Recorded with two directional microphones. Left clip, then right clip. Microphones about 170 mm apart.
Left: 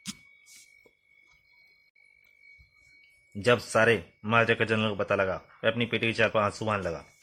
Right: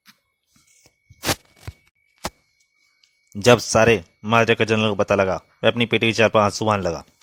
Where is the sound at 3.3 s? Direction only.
55° right (ahead or behind).